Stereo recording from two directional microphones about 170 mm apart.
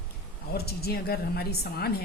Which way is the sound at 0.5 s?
65° left (ahead or behind).